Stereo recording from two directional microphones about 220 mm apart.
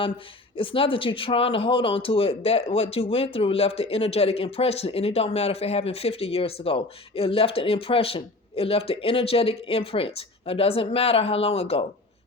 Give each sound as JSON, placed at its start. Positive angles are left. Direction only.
{"t": 0.5, "sound": "speech", "side_deg": 25}